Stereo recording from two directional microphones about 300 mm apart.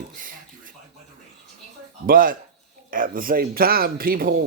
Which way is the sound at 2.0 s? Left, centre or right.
Right.